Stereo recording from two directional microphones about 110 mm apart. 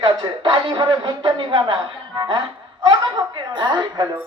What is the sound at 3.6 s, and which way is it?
Speech, 40° right (ahead or behind).